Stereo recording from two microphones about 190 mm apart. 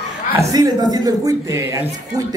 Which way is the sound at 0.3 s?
15° right (ahead or behind).